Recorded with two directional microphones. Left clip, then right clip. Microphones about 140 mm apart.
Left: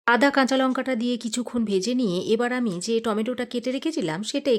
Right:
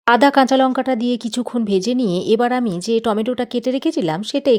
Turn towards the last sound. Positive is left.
turn(degrees=-25)  # may be behind; listen again after turning